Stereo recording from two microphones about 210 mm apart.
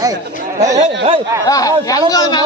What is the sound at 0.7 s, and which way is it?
Speech, 30° right (ahead or behind).